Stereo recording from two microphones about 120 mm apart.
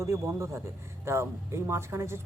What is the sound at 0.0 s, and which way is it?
Speech, 25° right (ahead or behind).